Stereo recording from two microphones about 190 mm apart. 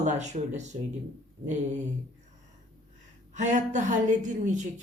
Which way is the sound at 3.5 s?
40° right (ahead or behind).